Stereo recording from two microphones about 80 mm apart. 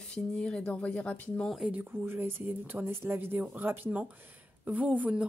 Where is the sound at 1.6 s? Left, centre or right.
Right.